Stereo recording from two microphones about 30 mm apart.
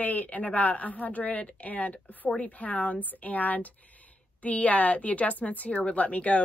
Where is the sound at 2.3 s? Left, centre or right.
Left.